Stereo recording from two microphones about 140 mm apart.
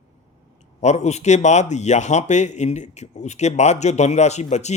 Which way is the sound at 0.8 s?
55° left (ahead or behind).